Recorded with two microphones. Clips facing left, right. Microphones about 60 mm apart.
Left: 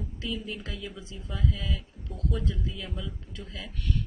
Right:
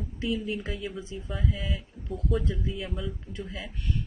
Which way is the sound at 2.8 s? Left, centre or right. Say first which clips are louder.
Right 4 dB; centre.